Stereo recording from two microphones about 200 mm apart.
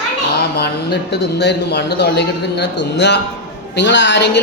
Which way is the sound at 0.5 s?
55° left (ahead or behind).